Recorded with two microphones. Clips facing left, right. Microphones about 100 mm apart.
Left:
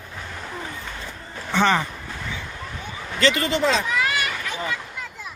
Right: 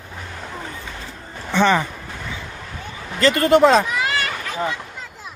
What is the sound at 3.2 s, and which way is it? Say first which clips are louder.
Speech: right 7 dB; 50° right (ahead or behind).